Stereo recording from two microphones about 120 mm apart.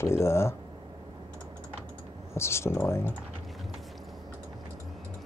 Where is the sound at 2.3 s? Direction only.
20° left (ahead or behind).